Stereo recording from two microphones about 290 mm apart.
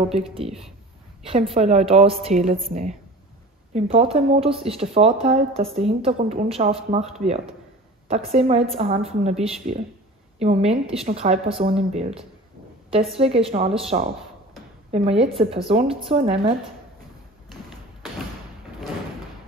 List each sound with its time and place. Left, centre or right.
0.4 s speech: centre
1.2 s speech: centre
12.9 s speech: centre